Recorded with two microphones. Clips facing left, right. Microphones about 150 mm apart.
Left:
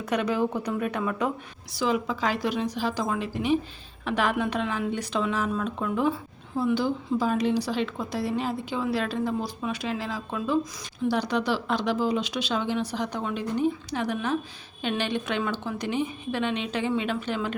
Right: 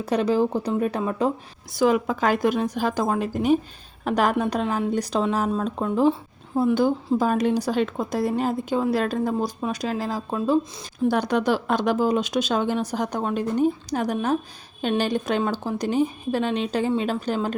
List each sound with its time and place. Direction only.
0.0 s a woman's voice: 30° right (ahead or behind)
1.7 s a woman's voice: 50° right (ahead or behind); by 6.1 s 35° right (ahead or behind)
6.6 s a woman's voice: 50° right (ahead or behind)
11.1 s a woman's voice: 50° right (ahead or behind)